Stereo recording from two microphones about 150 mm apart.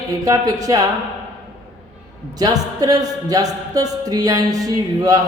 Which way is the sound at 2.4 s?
25° right (ahead or behind).